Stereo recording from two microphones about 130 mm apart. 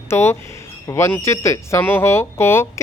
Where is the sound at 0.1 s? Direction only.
20° left (ahead or behind).